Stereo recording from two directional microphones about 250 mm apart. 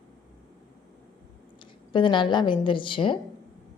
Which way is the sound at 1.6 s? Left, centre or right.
Centre.